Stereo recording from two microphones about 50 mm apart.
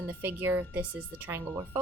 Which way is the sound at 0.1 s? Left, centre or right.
Right.